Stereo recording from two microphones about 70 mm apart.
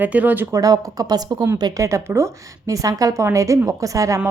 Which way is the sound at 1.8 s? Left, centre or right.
Right.